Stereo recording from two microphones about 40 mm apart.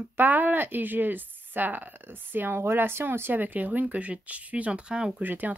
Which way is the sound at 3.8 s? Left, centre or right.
Right.